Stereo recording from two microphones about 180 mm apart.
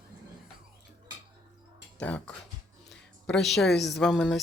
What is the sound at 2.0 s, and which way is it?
Speech, 5° left (ahead or behind).